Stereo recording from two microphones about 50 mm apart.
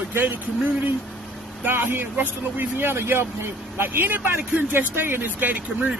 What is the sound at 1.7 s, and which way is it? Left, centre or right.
Speech, right.